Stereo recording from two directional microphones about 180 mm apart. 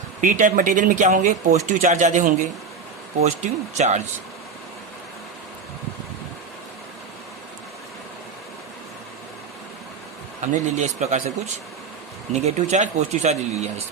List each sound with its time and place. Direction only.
0.2 s speech: 45° right (ahead or behind)
10.4 s speech: 40° right (ahead or behind)
12.3 s speech: 40° right (ahead or behind)